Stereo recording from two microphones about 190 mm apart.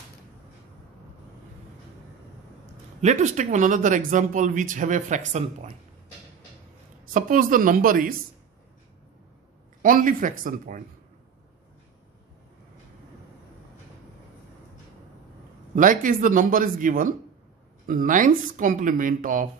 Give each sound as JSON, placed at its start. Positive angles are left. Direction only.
{"t": 3.0, "sound": "speech", "side_deg": -40}
{"t": 7.2, "sound": "a woman's voice", "side_deg": -45}
{"t": 9.8, "sound": "a woman's voice", "side_deg": -45}
{"t": 15.7, "sound": "a woman's voice", "side_deg": -45}